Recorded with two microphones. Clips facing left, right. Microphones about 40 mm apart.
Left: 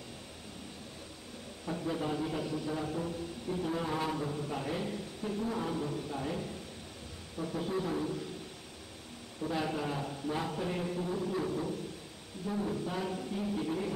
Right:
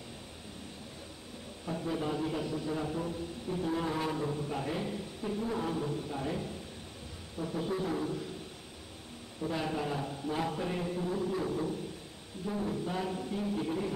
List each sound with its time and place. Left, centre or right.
1.7 s a man's voice: centre
9.5 s a man's voice: centre